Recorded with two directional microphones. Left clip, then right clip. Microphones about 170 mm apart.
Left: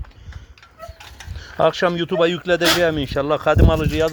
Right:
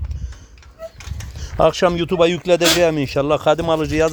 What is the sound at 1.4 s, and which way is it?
Speech, 25° right (ahead or behind).